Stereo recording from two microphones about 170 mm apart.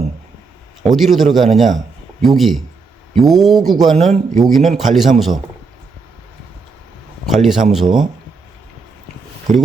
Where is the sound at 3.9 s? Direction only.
45° right (ahead or behind).